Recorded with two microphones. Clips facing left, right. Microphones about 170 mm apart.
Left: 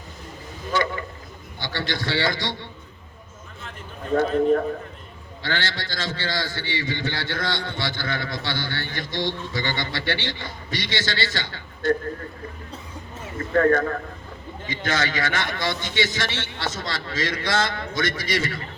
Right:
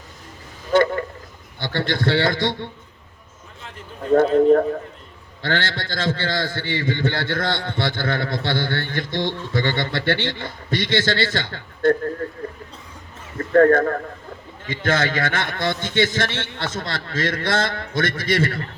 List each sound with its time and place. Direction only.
0.7 s a man's voice: 55° right (ahead or behind)
4.3 s a man's voice: 40° right (ahead or behind)
5.4 s a man's voice: 55° right (ahead or behind)
13.4 s a man's voice: 45° right (ahead or behind)